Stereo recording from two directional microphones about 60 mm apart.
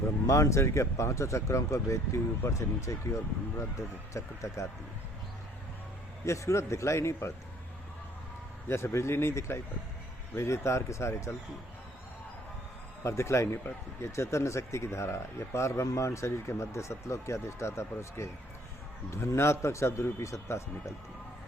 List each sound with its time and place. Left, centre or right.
0.3 s speech: left
6.2 s speech: left
8.6 s speech: left
13.0 s speech: left